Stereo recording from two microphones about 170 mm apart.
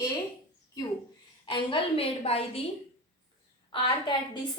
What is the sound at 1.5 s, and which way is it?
Speech, 30° left (ahead or behind).